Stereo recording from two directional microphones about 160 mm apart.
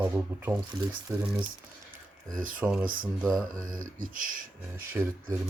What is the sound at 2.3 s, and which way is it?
Speech, 60° right (ahead or behind).